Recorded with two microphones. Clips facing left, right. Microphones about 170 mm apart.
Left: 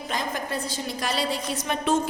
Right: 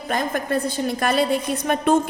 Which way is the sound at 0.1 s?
55° right (ahead or behind).